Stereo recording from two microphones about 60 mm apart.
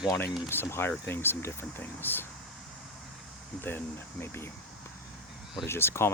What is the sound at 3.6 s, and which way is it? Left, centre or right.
Speech, left.